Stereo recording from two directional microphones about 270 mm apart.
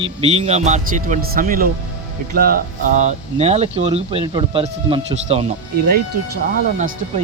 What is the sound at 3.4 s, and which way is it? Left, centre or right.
Speech, right.